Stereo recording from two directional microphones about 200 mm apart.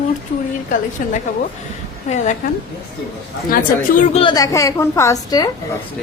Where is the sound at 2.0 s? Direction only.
35° left (ahead or behind).